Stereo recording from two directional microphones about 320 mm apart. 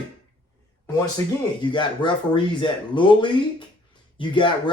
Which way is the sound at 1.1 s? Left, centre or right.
Centre.